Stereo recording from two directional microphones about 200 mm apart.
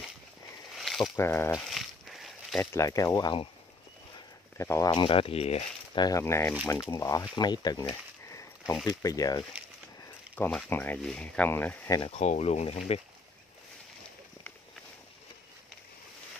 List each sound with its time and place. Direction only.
0.7 s a sound: centre (ahead or behind)
1.1 s speech: 10° left (ahead or behind)
1.7 s a sound: centre (ahead or behind)
2.6 s speech: 15° left (ahead or behind)
4.6 s speech: 15° left (ahead or behind); by 6.0 s 30° left (ahead or behind)
6.0 s speech: 15° left (ahead or behind)
7.3 s snake: 20° left (ahead or behind)
8.8 s speech: 20° left (ahead or behind)
12.0 s speech: 30° left (ahead or behind)